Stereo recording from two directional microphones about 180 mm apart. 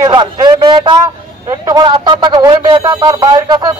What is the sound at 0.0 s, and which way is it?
A man's voice, 25° right (ahead or behind).